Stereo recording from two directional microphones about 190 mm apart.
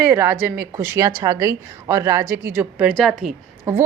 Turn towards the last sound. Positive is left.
turn(degrees=-15)  # may be behind; listen again after turning